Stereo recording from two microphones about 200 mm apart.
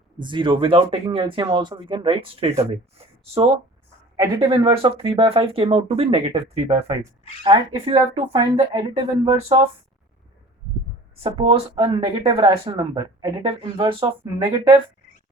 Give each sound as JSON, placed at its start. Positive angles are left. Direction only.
{"t": 0.2, "sound": "speech", "side_deg": -25}
{"t": 4.2, "sound": "speech", "side_deg": -20}
{"t": 7.0, "sound": "speech", "side_deg": -20}
{"t": 11.2, "sound": "speech", "side_deg": -25}